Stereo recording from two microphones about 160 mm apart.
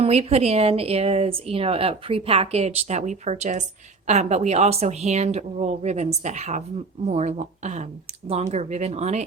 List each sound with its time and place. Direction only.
0.0 s a woman's voice: 40° right (ahead or behind)